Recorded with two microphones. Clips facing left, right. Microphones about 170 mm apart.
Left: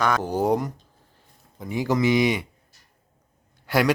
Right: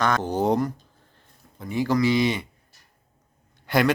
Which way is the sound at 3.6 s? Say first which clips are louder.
Even; 5° left (ahead or behind).